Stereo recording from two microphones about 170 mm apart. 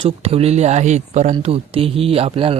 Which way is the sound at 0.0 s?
35° right (ahead or behind).